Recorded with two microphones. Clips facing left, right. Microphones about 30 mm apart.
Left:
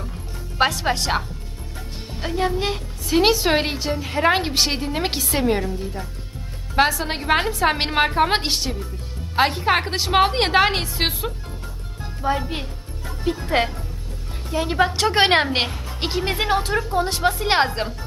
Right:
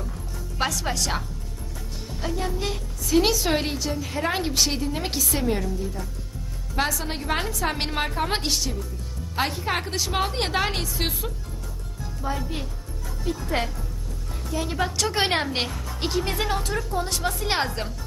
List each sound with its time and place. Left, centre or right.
0.6 s a woman's voice: left
2.2 s a woman's voice: left